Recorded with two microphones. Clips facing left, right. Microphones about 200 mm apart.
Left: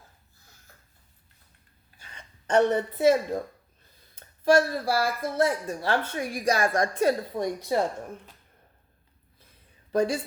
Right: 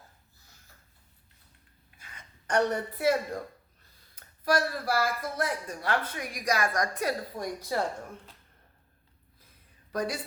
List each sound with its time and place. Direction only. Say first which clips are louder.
2.0 s a sound: left 3 dB; 30° left (ahead or behind)
4.1 s speech: left 7 dB; 25° left (ahead or behind)
9.9 s a woman's voice: left 7 dB; 30° left (ahead or behind)